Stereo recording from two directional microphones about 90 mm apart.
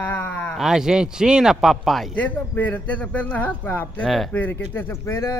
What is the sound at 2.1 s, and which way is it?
Speech, 20° left (ahead or behind).